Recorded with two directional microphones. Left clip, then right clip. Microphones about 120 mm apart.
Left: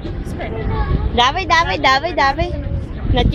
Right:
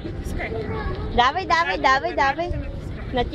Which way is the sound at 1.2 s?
10° left (ahead or behind).